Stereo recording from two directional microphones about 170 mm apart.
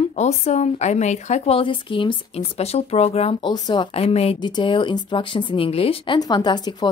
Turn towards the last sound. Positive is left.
turn(degrees=25)  # may be behind; listen again after turning